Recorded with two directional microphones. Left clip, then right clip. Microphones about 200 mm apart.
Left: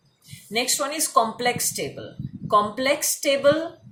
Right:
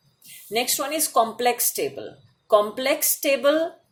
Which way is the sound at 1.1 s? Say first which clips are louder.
Even; 40° right (ahead or behind).